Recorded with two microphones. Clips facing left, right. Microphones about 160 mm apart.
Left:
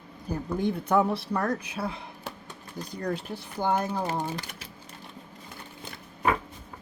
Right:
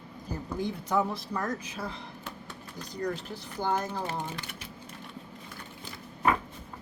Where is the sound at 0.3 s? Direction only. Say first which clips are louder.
Left 5 dB; 60° left (ahead or behind).